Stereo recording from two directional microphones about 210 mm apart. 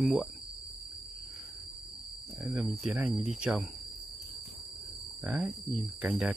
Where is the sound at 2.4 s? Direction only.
5° right (ahead or behind).